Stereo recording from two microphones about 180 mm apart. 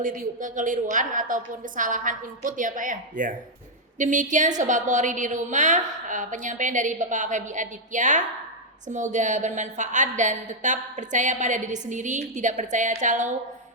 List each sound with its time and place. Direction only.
0.0 s a woman's voice: 50° right (ahead or behind)